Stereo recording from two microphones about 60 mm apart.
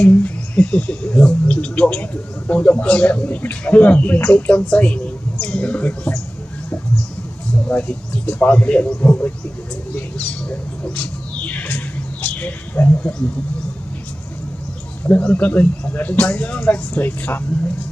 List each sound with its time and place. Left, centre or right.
0.0 s speech: left
7.6 s speech: left
11.0 s bird: left
12.7 s speech: left
15.0 s speech: left